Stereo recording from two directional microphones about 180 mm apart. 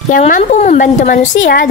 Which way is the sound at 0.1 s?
40° left (ahead or behind).